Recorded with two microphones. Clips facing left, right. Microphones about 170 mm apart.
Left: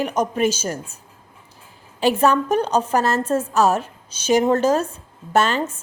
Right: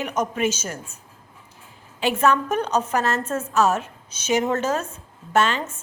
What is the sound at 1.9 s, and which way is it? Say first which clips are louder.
A woman's voice: left 3 dB; 35° left (ahead or behind).